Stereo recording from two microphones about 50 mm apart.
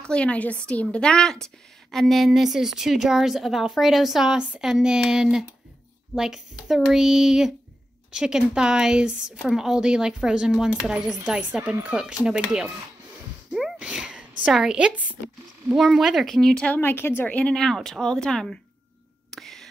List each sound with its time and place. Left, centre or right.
0.1 s a woman's voice: left; by 12.7 s centre
13.5 s a sound: centre
14.6 s a woman's voice: right
15.7 s a woman's voice: centre
16.6 s speech: left
17.0 s speech: left
17.4 s speech: centre
17.6 s speech: centre
19.3 s whispering: centre